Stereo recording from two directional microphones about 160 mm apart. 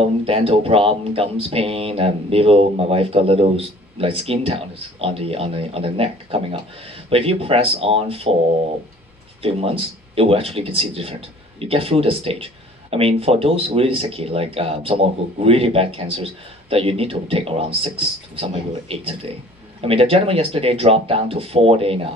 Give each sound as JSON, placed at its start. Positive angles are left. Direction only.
{"t": 0.3, "sound": "speech", "side_deg": -35}
{"t": 9.4, "sound": "speech", "side_deg": -35}